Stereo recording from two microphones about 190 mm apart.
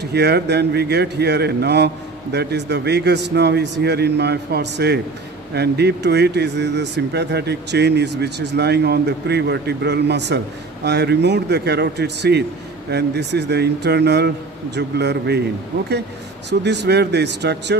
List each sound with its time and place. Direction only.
0.0 s speech: 60° right (ahead or behind)
16.4 s speech: 65° right (ahead or behind)